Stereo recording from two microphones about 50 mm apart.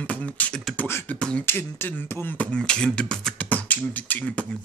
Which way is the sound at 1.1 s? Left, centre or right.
Centre.